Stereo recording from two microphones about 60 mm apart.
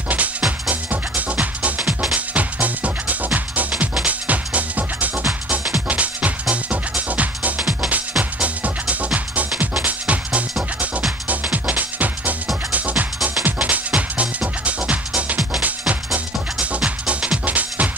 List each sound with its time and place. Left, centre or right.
0.7 s music: right
16.8 s music: centre